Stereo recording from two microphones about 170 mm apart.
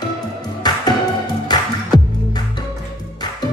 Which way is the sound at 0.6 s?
25° left (ahead or behind).